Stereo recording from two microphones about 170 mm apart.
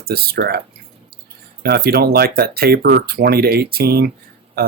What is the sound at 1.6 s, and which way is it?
Speech, 65° right (ahead or behind).